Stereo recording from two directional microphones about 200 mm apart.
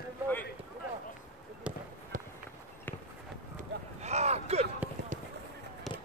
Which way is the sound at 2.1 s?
40° right (ahead or behind).